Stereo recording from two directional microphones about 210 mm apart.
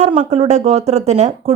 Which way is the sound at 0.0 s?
30° right (ahead or behind).